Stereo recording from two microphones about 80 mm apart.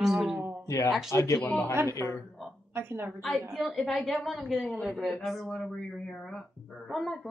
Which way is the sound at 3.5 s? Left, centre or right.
Centre.